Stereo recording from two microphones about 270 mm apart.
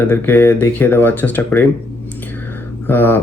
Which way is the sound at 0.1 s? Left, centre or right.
Centre.